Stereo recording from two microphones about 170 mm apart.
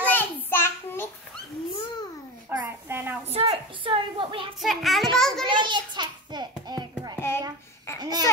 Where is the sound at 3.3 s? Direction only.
35° right (ahead or behind).